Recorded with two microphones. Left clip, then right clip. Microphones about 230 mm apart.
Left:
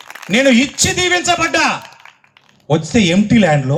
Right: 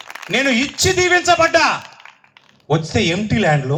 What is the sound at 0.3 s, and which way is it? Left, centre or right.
A man's voice, left.